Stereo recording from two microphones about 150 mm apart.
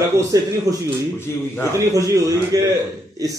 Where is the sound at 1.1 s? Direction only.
15° left (ahead or behind).